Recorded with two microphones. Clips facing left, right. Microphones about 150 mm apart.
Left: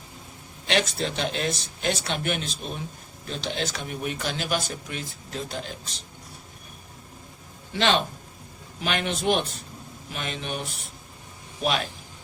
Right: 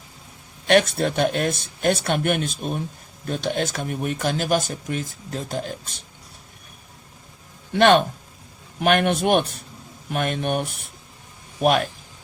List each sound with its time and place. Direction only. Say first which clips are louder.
0.7 s speech: right 7 dB; 55° right (ahead or behind)
7.7 s a man's voice: right 8 dB; 55° right (ahead or behind)